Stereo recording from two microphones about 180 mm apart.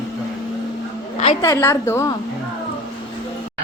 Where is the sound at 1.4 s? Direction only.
15° left (ahead or behind).